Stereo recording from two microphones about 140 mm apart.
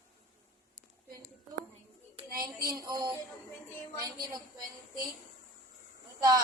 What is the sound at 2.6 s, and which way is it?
Speech, 30° right (ahead or behind).